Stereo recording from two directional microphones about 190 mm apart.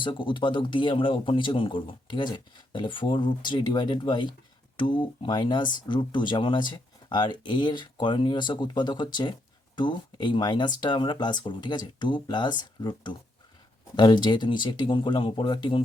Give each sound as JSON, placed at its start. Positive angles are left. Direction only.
{"t": 0.0, "sound": "speech", "side_deg": 25}